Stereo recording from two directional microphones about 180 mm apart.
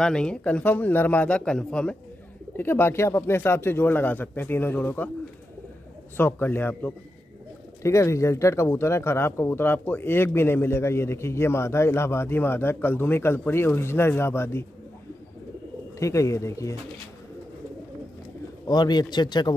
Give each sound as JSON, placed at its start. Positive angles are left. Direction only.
{"t": 0.0, "sound": "speech", "side_deg": 5}
{"t": 6.1, "sound": "speech", "side_deg": 10}
{"t": 16.0, "sound": "speech", "side_deg": 15}
{"t": 18.7, "sound": "a man's voice", "side_deg": 25}